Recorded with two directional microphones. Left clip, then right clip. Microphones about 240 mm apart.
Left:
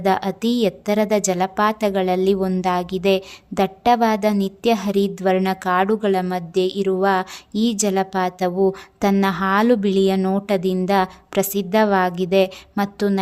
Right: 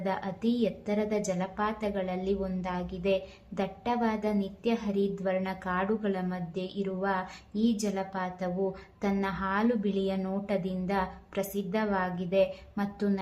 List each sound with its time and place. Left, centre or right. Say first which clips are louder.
0.0 s a woman's voice: left 12 dB; left